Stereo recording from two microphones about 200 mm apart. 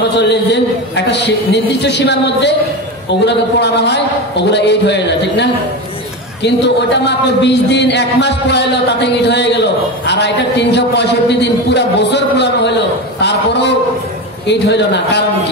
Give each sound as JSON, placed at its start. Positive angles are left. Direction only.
{"t": 0.2, "sound": "a man's voice", "side_deg": 60}